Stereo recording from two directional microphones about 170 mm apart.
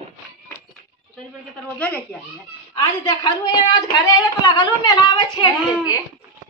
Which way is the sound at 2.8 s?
25° left (ahead or behind).